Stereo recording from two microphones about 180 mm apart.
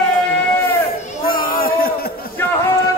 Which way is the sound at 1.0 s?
40° left (ahead or behind).